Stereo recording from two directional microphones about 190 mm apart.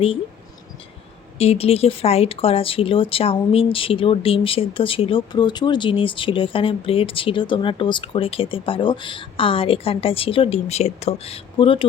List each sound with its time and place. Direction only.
1.4 s speech: 30° left (ahead or behind)